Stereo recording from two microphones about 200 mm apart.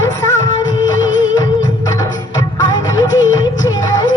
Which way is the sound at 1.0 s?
70° left (ahead or behind).